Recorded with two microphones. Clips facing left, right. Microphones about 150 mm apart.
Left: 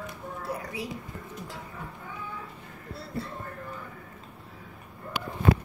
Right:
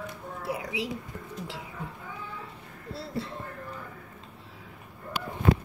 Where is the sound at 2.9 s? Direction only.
90° right.